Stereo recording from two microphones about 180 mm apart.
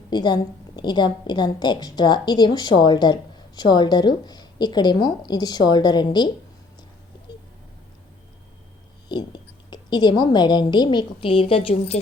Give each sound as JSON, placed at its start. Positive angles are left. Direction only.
{"t": 0.1, "sound": "a woman's voice", "side_deg": 25}
{"t": 9.0, "sound": "a woman's voice", "side_deg": 25}